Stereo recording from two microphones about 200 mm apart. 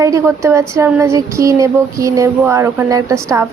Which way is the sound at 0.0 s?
15° right (ahead or behind).